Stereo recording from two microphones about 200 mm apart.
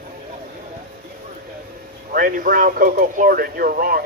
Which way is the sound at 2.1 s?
45° right (ahead or behind).